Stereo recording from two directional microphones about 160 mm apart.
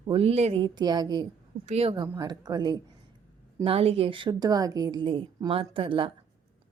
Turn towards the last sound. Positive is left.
turn(degrees=-35)  # may be behind; listen again after turning